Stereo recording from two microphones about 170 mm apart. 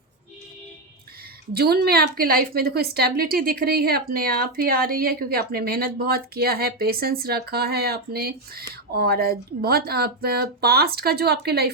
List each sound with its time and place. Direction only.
1.5 s a woman's voice: 65° right (ahead or behind)